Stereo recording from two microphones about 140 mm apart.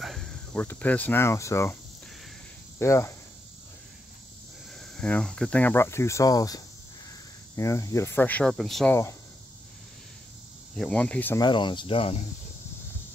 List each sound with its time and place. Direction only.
0.0 s cricket: centre (ahead or behind)
0.6 s speech: 10° left (ahead or behind)
2.8 s speech: 20° left (ahead or behind)
4.7 s speech: 5° left (ahead or behind)
10.8 s speech: 10° left (ahead or behind)
11.3 s speech: 35° left (ahead or behind)